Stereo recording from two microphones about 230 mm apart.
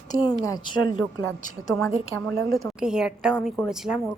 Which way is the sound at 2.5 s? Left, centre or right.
Centre.